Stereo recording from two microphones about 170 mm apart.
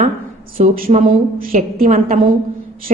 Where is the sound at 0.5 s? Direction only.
55° right (ahead or behind).